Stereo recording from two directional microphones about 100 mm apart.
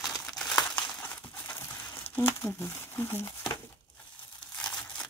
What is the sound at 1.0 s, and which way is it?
Crumpling, 20° left (ahead or behind).